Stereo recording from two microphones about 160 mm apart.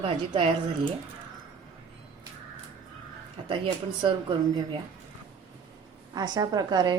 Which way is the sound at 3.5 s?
30° right (ahead or behind).